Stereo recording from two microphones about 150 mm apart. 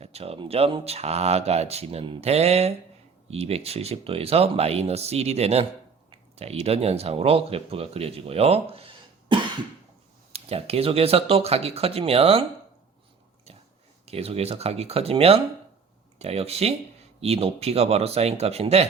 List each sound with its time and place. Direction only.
0.0 s speech: 45° right (ahead or behind)
14.0 s speech: 40° right (ahead or behind)